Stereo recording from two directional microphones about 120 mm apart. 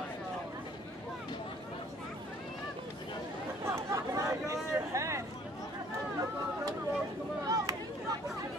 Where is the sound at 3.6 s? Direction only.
25° right (ahead or behind).